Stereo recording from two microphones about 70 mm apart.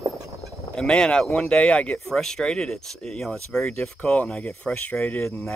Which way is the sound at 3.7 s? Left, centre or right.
Centre.